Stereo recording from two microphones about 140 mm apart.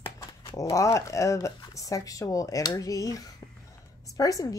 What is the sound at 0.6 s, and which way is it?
Speech, 20° left (ahead or behind).